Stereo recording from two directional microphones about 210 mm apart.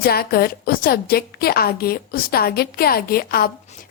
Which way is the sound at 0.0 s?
45° left (ahead or behind).